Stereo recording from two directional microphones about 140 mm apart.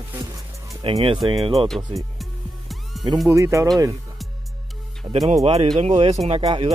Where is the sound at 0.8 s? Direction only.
35° right (ahead or behind).